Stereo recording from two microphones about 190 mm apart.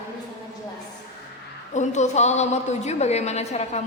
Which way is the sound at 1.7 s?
40° left (ahead or behind).